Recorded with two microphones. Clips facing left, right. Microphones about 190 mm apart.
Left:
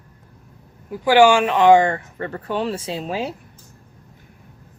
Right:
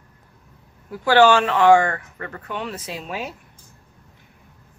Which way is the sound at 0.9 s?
15° left (ahead or behind).